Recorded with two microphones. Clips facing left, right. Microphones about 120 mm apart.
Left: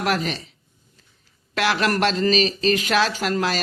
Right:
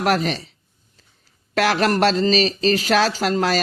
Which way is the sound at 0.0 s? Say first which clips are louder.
Right 4 dB; 40° right (ahead or behind).